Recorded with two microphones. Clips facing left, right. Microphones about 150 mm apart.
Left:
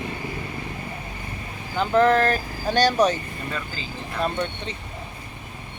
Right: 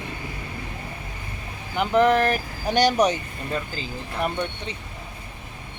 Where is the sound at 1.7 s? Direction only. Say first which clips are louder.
Even; 15° right (ahead or behind).